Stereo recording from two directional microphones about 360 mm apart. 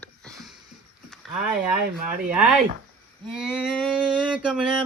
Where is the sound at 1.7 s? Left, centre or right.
Right.